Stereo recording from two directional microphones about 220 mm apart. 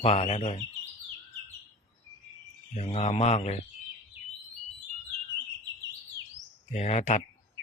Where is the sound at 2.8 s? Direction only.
30° left (ahead or behind).